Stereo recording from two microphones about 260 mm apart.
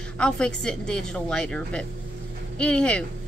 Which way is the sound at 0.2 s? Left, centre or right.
Centre.